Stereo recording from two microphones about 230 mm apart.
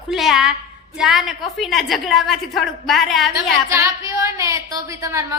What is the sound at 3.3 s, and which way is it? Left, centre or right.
A woman's voice, centre.